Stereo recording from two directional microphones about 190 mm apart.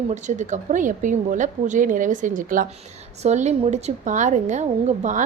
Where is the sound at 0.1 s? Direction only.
40° right (ahead or behind).